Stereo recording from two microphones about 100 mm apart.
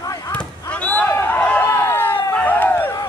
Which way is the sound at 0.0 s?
35° left (ahead or behind).